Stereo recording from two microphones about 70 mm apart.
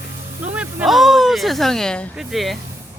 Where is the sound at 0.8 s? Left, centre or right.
Centre.